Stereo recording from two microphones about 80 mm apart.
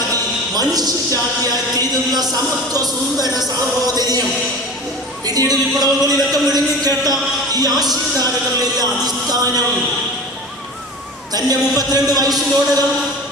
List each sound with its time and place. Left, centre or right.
0.1 s a sound: right
1.8 s music: right
5.2 s music: right
8.8 s speech: right
11.3 s music: right